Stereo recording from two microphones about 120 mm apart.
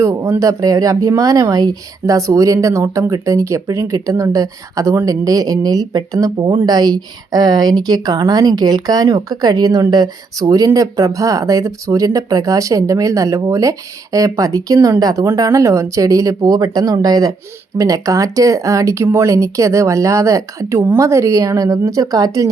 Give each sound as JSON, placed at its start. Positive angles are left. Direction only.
{"t": 0.0, "sound": "speech", "side_deg": -25}